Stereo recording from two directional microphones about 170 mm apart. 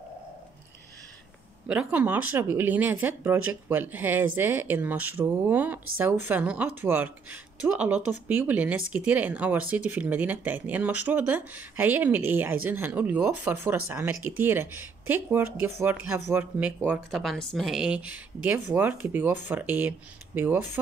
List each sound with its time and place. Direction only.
1.7 s speech: 10° right (ahead or behind)